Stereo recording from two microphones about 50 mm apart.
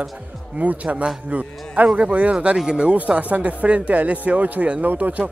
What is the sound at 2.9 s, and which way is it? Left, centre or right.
Speech, right.